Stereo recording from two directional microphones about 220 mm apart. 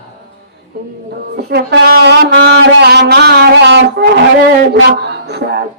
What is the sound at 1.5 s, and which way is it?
A man's voice, 45° right (ahead or behind).